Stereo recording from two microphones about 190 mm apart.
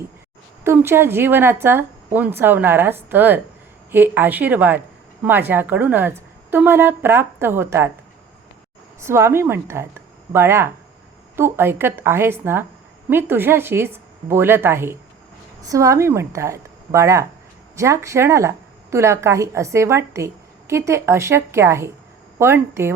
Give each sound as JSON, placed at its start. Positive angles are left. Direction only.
{"t": 0.6, "sound": "speech", "side_deg": -15}
{"t": 9.0, "sound": "speech", "side_deg": -15}